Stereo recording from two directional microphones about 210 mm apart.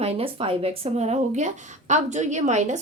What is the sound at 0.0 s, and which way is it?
A woman's voice, 30° right (ahead or behind).